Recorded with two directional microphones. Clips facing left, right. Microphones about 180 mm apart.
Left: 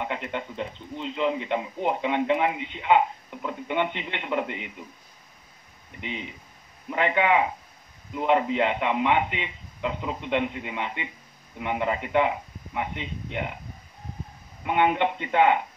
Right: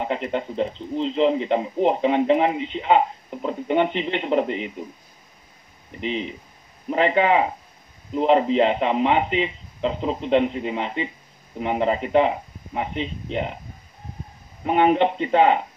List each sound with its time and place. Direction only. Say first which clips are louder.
0.0 s speech: right 6 dB; 35° right (ahead or behind)
5.9 s speech: right 8 dB; 30° right (ahead or behind)
14.6 s speech: right 5 dB; 35° right (ahead or behind)